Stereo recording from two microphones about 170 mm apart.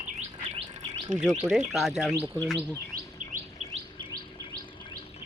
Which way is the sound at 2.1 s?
15° right (ahead or behind).